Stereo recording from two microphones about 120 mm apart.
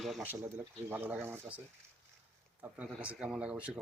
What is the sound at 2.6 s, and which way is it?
Speech, 10° right (ahead or behind).